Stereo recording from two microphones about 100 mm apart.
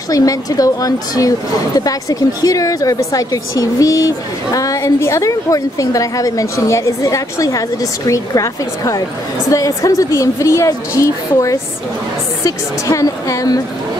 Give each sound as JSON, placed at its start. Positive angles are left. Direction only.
{"t": 0.1, "sound": "a woman's voice", "side_deg": 35}